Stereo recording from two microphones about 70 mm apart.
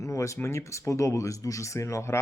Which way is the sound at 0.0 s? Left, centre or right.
Left.